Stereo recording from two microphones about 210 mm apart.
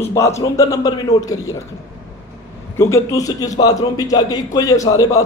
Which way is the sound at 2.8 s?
15° left (ahead or behind).